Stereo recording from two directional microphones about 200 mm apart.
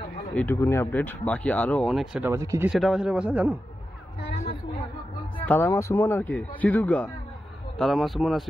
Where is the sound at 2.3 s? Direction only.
15° right (ahead or behind).